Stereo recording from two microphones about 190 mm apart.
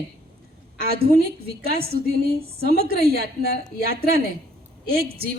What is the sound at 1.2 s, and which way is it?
A woman's voice, 55° right (ahead or behind).